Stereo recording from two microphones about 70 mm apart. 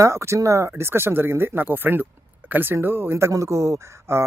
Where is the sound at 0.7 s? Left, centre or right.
Right.